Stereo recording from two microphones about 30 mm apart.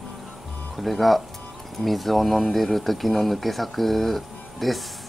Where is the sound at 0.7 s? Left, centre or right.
Centre.